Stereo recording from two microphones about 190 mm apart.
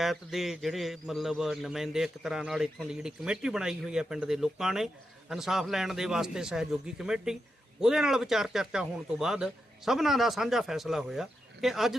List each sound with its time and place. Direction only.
0.0 s a man's voice: centre (ahead or behind)